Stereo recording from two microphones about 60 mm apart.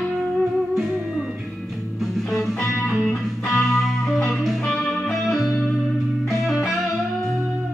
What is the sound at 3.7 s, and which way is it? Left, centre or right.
Music, centre.